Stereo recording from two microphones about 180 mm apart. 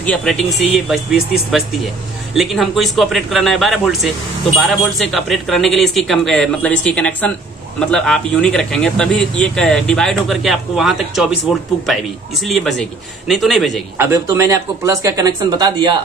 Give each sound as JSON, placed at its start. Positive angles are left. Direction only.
{"t": 0.0, "sound": "speech", "side_deg": 5}
{"t": 13.9, "sound": "speech", "side_deg": -15}